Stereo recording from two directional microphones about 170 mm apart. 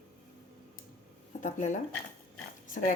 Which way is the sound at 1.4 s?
45° left (ahead or behind).